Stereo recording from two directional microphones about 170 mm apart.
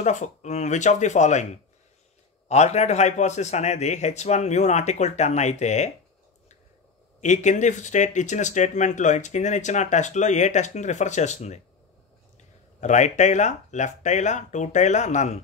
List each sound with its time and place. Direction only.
0.0 s a man's voice: 45° left (ahead or behind)
7.2 s speech: 45° left (ahead or behind)